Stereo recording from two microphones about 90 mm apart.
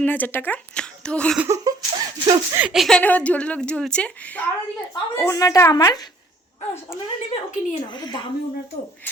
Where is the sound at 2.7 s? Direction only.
5° left (ahead or behind).